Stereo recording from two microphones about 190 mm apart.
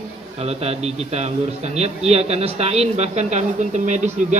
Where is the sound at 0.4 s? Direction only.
35° right (ahead or behind).